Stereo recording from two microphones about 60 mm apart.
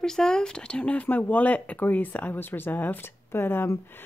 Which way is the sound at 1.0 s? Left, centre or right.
Left.